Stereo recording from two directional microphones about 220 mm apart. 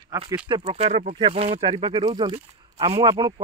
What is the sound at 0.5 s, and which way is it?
Speech, 25° right (ahead or behind).